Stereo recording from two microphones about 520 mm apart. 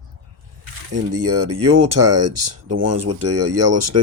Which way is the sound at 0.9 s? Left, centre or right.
Right.